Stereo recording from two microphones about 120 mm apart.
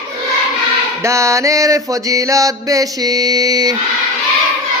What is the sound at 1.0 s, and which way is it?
Mantra, 25° right (ahead or behind).